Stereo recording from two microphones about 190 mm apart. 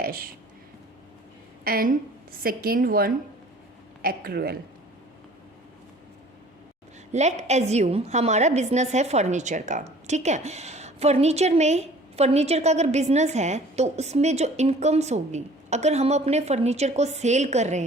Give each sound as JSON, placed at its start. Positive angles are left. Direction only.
{"t": 0.0, "sound": "speech", "side_deg": -50}
{"t": 1.6, "sound": "a woman's voice", "side_deg": -50}
{"t": 7.1, "sound": "a woman's voice", "side_deg": -35}